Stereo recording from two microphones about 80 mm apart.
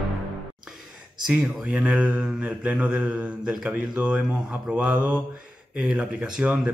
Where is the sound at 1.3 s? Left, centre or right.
Centre.